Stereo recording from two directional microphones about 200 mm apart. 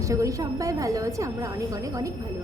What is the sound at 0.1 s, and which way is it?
A woman's voice, 15° right (ahead or behind).